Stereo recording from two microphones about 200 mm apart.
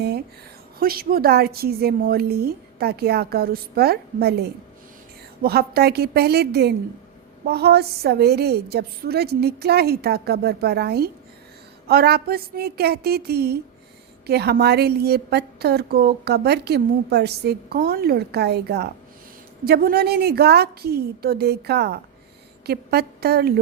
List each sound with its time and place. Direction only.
0.8 s a woman's voice: 50° right (ahead or behind)